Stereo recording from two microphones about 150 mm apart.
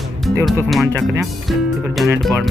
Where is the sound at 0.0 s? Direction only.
Centre (ahead or behind).